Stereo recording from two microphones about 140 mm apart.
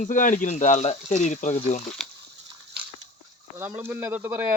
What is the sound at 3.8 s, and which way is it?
Speech, 15° right (ahead or behind).